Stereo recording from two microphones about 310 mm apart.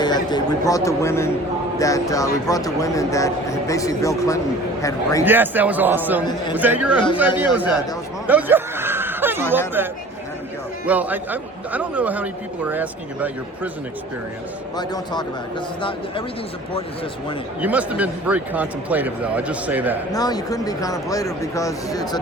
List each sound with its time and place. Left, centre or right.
0.0 s speech: centre
5.2 s a man's voice: centre
8.3 s a sound: centre
9.8 s a man's voice: centre
14.8 s speech: centre
17.6 s a man's voice: centre
20.1 s speech: centre